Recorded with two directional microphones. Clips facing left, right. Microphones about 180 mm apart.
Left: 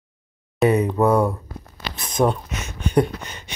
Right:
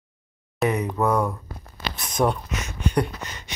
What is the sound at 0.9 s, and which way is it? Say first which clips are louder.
Speech: left 5 dB; 10° left (ahead or behind).